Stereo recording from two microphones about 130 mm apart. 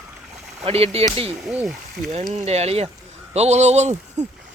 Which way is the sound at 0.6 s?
50° right (ahead or behind).